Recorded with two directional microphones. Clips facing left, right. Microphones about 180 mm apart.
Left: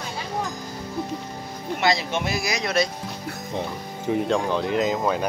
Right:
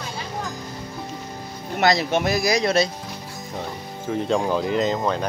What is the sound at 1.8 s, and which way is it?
Speech, 45° right (ahead or behind).